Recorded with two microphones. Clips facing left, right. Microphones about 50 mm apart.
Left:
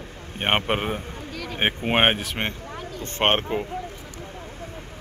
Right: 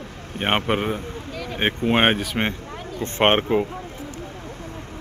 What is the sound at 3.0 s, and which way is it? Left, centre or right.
Speech, centre.